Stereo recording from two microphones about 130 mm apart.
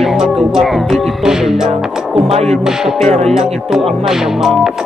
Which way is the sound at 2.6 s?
5° right (ahead or behind).